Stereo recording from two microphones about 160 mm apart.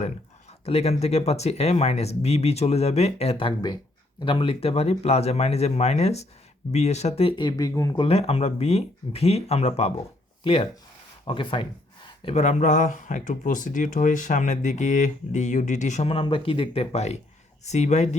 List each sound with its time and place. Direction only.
0.6 s speech: 40° left (ahead or behind); by 8.0 s 20° left (ahead or behind)
8.0 s speech: 40° left (ahead or behind)
12.3 s speech: 45° left (ahead or behind)